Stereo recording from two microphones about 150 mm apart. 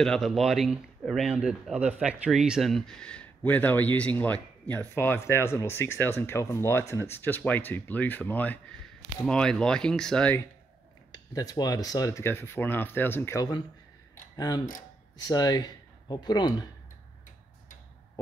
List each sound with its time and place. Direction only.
0.0 s speech: centre (ahead or behind)
11.3 s speech: 25° left (ahead or behind)